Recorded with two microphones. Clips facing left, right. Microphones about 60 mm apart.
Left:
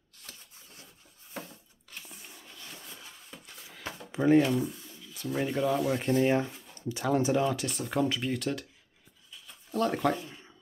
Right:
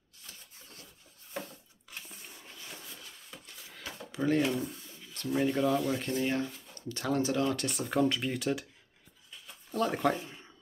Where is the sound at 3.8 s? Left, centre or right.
Left.